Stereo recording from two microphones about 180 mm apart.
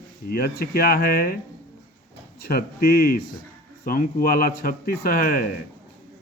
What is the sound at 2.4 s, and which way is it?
Speech, 60° left (ahead or behind).